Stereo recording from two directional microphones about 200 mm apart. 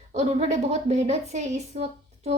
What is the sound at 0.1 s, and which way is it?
A woman's voice, 35° right (ahead or behind).